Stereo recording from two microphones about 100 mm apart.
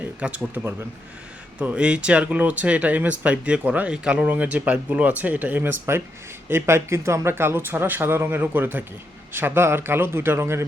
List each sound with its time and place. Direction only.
0.0 s speech: 10° right (ahead or behind)